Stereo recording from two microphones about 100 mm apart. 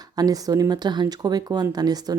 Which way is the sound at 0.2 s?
40° right (ahead or behind).